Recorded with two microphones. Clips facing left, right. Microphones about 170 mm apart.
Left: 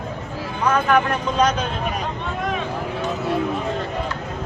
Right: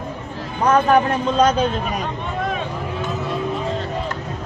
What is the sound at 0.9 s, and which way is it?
Speech, 30° right (ahead or behind).